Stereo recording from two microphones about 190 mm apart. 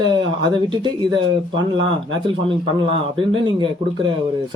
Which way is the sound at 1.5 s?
90° right.